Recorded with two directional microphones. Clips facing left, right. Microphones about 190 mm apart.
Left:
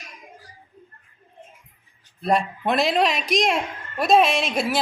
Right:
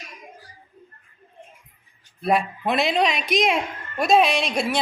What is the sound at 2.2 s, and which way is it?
A woman's voice, centre (ahead or behind).